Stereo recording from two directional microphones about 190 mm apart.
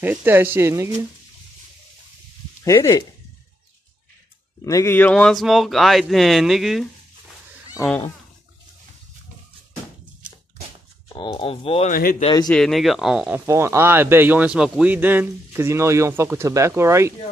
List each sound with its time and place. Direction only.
0.0 s speech: 10° right (ahead or behind)
2.6 s speech: 15° left (ahead or behind)
4.6 s speech: 15° left (ahead or behind); by 6.9 s centre (ahead or behind)
11.1 s speech: 30° left (ahead or behind)
11.9 s speech: 50° left (ahead or behind)
12.2 s speech: 25° left (ahead or behind)
12.4 s speech: 5° left (ahead or behind)
13.5 s speech: 15° right (ahead or behind)